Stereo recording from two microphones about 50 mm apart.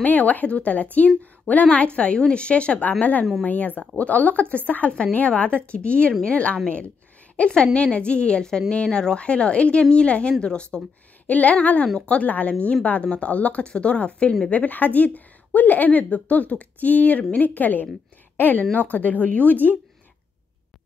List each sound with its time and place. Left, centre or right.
0.0 s a woman's voice: left
11.2 s a woman's voice: left